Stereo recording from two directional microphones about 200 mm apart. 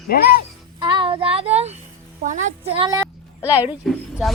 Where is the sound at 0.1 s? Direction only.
50° left (ahead or behind).